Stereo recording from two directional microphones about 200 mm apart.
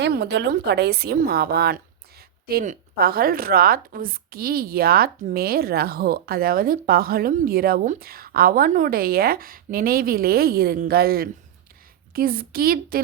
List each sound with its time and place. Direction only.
0.0 s a woman's voice: 55° right (ahead or behind)